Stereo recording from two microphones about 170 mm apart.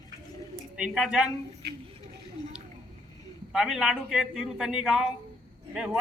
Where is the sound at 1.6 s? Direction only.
70° right (ahead or behind).